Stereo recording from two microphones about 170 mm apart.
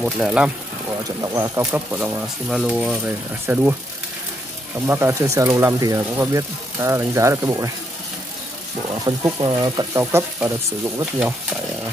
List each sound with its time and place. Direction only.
0.0 s speech: 5° right (ahead or behind)
1.2 s speech: 15° right (ahead or behind)
4.8 s speech: 15° right (ahead or behind)
9.1 s speech: 20° right (ahead or behind)